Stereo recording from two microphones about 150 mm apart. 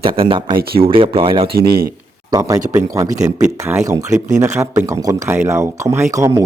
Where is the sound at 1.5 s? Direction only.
90° right.